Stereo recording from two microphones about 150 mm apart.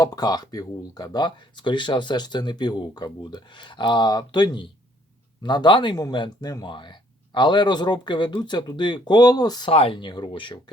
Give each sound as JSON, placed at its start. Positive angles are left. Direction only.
{"t": 0.0, "sound": "speech", "side_deg": 25}